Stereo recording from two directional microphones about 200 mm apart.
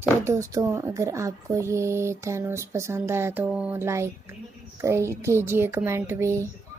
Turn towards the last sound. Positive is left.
turn(degrees=-15)  # may be behind; listen again after turning